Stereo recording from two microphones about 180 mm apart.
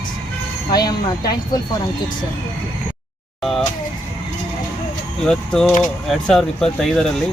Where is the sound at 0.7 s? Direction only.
20° left (ahead or behind).